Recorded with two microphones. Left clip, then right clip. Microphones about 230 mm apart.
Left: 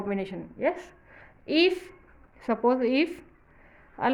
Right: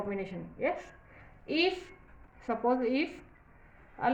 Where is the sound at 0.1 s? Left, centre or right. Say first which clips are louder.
Left 5 dB; left.